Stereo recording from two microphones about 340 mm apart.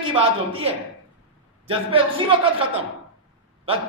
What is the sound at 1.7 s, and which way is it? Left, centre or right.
Speech, centre.